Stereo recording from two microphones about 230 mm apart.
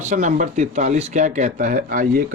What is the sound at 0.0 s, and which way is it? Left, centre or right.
Speech, right.